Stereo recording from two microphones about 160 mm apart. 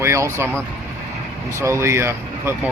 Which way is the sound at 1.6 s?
15° right (ahead or behind).